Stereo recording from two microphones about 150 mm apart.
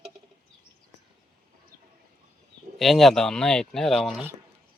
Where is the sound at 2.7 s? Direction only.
Centre (ahead or behind).